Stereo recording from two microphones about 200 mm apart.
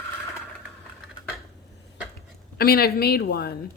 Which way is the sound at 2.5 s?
50° left (ahead or behind).